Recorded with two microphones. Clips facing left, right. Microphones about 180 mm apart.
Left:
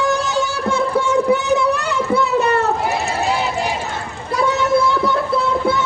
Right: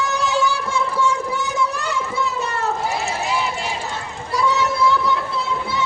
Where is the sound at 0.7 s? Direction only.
60° left (ahead or behind).